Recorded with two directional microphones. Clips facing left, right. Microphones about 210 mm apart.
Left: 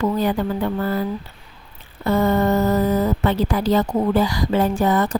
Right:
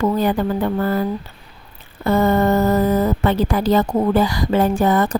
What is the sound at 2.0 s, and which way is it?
Speech, 50° right (ahead or behind).